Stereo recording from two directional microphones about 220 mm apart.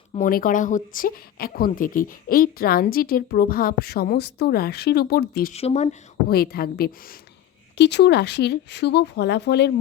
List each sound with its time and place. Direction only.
0.1 s speech: 35° left (ahead or behind)
5.5 s speech: 30° left (ahead or behind)
6.2 s speech: 45° left (ahead or behind)